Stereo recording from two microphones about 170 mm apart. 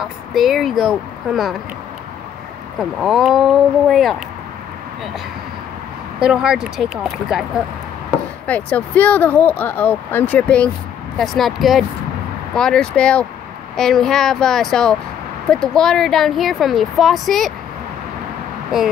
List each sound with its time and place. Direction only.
0.0 s speech: centre (ahead or behind)
2.8 s speech: centre (ahead or behind)
6.1 s speech: 5° right (ahead or behind)
8.5 s speech: 10° left (ahead or behind)